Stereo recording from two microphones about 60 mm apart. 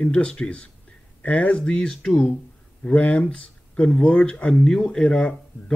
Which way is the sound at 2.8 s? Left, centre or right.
Left.